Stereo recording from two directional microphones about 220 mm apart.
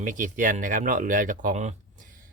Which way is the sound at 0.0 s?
35° right (ahead or behind).